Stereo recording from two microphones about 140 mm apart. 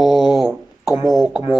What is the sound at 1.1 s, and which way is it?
Speech, centre (ahead or behind).